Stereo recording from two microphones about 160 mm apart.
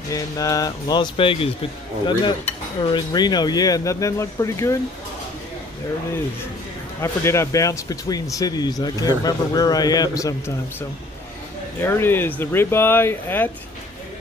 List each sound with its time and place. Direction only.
0.1 s speech: 20° left (ahead or behind)
7.0 s speech: 20° left (ahead or behind)